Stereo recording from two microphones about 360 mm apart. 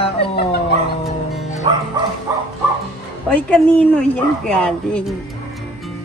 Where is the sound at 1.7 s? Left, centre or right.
Centre.